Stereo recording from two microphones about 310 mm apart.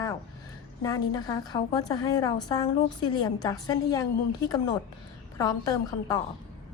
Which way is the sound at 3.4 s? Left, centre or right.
Centre.